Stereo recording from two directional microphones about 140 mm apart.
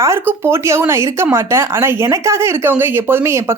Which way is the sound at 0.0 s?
20° right (ahead or behind).